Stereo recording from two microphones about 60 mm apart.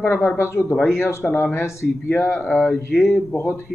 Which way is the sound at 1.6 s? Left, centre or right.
Left.